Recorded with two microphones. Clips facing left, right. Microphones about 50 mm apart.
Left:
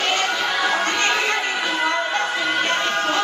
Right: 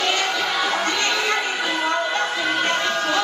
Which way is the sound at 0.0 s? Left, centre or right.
Left.